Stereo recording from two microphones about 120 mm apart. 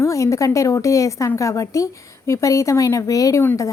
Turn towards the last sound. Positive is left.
turn(degrees=25)  # may be behind; listen again after turning